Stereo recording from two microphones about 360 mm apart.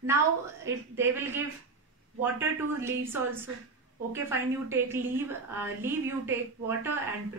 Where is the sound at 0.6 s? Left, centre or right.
Centre.